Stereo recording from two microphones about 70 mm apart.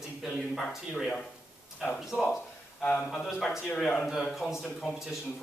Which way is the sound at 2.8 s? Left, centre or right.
Centre.